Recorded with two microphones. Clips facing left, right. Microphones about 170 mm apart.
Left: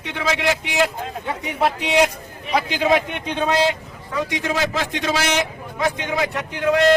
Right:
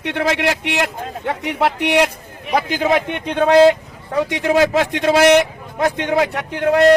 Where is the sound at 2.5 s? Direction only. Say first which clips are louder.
Right 2 dB; 50° right (ahead or behind).